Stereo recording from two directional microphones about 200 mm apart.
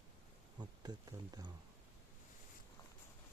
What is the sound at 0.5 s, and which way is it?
Speech, 20° right (ahead or behind).